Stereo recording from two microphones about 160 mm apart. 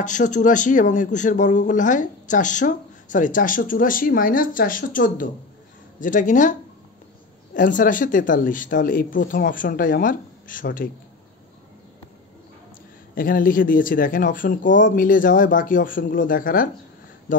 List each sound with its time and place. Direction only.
0.0 s speech: 50° left (ahead or behind)
7.5 s speech: 55° left (ahead or behind)
13.1 s speech: 60° left (ahead or behind)